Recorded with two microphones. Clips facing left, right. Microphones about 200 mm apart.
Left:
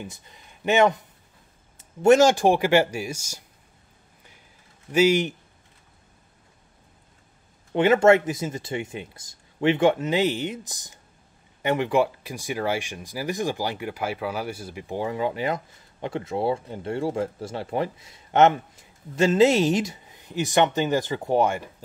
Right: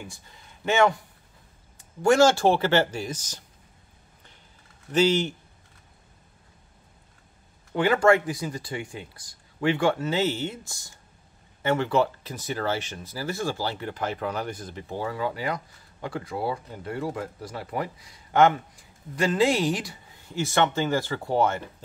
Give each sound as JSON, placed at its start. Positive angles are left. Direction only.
{"t": 0.0, "sound": "speech", "side_deg": 20}
{"t": 4.9, "sound": "speech", "side_deg": 10}
{"t": 7.7, "sound": "speech", "side_deg": 20}